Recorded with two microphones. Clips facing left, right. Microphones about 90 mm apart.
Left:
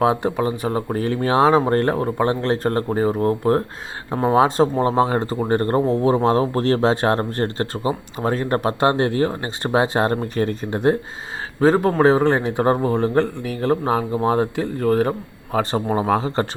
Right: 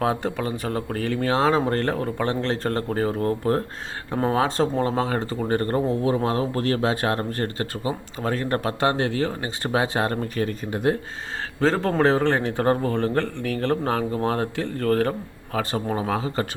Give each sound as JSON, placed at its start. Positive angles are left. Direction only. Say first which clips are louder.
{"t": 0.0, "sound": "speech", "louder": "left 6 dB", "side_deg": 20}
{"t": 4.1, "sound": "speech", "louder": "left 6 dB", "side_deg": 15}
{"t": 11.6, "sound": "speech", "louder": "left 5 dB", "side_deg": 15}
{"t": 15.5, "sound": "speech", "louder": "left 5 dB", "side_deg": 30}